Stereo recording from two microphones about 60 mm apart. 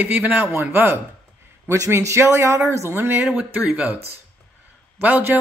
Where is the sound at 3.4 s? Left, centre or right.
Right.